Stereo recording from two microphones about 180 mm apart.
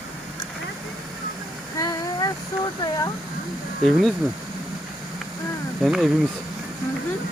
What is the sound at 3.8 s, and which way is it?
Speech, centre (ahead or behind).